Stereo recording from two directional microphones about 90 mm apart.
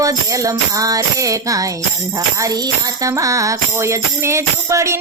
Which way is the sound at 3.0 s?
40° right (ahead or behind).